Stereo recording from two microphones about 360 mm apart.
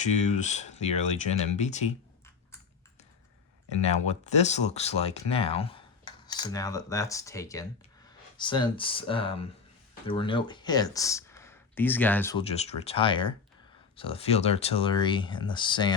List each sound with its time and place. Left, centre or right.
0.0 s speech: centre
3.7 s speech: centre